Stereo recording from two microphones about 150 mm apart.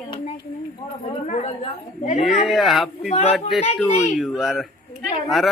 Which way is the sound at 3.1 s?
45° left (ahead or behind).